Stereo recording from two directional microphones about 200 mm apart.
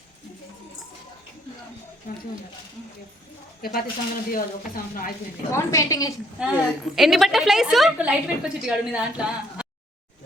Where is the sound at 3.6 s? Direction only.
50° left (ahead or behind).